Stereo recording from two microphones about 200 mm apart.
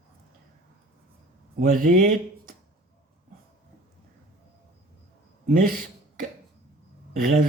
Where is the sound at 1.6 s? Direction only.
45° right (ahead or behind).